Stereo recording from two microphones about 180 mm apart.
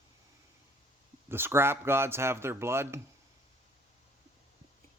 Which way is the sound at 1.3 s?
15° right (ahead or behind).